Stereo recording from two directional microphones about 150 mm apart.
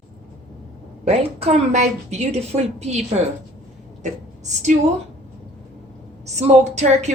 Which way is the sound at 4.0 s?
50° right (ahead or behind).